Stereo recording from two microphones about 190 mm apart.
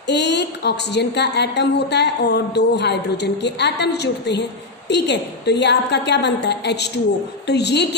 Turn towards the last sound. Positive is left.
turn(degrees=60)  # may be behind; listen again after turning